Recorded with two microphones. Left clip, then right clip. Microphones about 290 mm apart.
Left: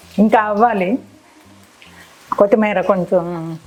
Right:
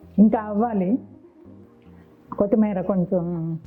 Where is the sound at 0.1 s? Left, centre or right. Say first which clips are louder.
Left 8 dB; centre.